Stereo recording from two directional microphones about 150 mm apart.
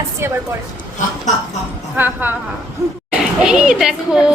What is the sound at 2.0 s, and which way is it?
Speech, 15° right (ahead or behind).